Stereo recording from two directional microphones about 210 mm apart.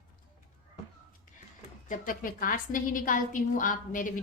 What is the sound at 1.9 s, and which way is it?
A woman's voice, 40° left (ahead or behind).